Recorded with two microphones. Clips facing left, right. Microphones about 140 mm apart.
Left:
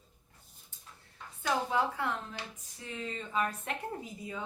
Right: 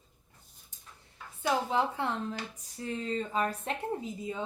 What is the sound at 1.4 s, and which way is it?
Speech, 25° right (ahead or behind).